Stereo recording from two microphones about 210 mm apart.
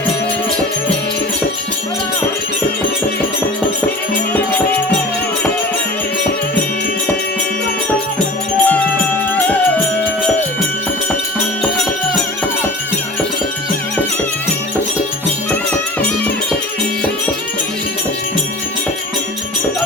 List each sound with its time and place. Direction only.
8.7 s music: 5° left (ahead or behind)